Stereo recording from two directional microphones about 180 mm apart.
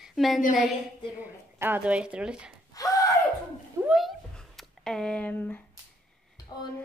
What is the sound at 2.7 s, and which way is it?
Gasp, 20° left (ahead or behind).